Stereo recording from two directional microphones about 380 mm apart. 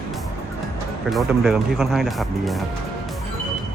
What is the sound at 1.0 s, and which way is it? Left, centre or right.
Speech, centre.